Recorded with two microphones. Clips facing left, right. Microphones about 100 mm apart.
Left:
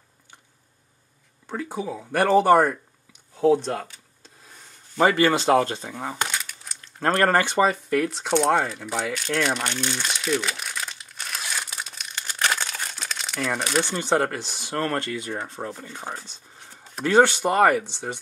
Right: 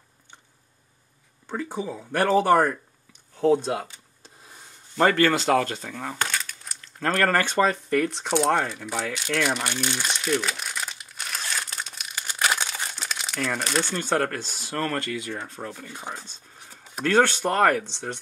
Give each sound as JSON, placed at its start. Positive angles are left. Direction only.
{"t": 1.5, "sound": "speech", "side_deg": 5}
{"t": 3.3, "sound": "speech", "side_deg": 0}
{"t": 4.9, "sound": "speech", "side_deg": 10}
{"t": 7.0, "sound": "speech", "side_deg": 30}
{"t": 7.3, "sound": "speech", "side_deg": 15}
{"t": 9.2, "sound": "crumpling", "side_deg": 0}
{"t": 13.6, "sound": "speech", "side_deg": 5}
{"t": 15.2, "sound": "speech", "side_deg": 40}
{"t": 15.5, "sound": "speech", "side_deg": 25}
{"t": 17.0, "sound": "speech", "side_deg": 15}